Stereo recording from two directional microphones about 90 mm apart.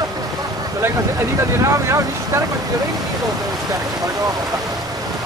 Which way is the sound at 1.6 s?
35° right (ahead or behind).